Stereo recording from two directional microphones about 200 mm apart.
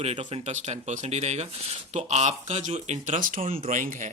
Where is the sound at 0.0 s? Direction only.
30° right (ahead or behind).